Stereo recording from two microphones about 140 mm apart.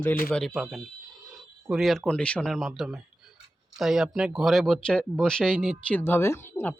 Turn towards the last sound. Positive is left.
turn(degrees=15)  # may be behind; listen again after turning